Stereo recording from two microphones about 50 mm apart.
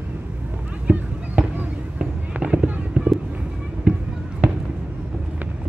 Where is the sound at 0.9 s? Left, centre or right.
Right.